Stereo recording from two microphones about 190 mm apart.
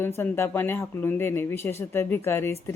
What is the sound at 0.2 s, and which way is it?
Speech, 10° left (ahead or behind).